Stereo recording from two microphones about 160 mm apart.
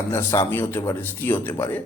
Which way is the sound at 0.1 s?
15° left (ahead or behind).